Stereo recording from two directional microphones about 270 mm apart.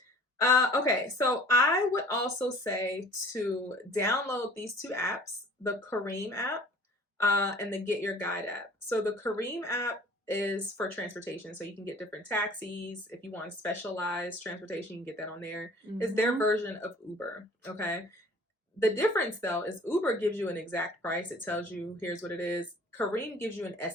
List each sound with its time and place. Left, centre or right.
0.3 s a woman's voice: centre